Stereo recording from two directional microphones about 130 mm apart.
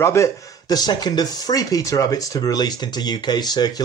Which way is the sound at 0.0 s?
20° left (ahead or behind).